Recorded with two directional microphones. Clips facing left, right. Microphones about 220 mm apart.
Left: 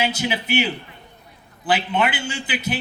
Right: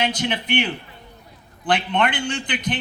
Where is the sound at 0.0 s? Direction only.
5° left (ahead or behind).